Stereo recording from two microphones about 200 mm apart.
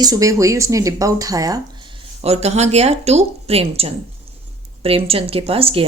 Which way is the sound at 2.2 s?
30° right (ahead or behind).